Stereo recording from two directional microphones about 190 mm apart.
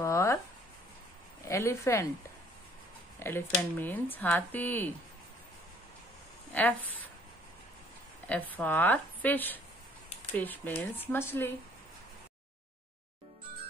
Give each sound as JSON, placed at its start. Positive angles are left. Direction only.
{"t": 0.0, "sound": "a sound", "side_deg": 15}
{"t": 1.4, "sound": "speech", "side_deg": 15}
{"t": 3.2, "sound": "speech", "side_deg": 10}
{"t": 6.5, "sound": "speech", "side_deg": 10}
{"t": 8.3, "sound": "speech", "side_deg": 10}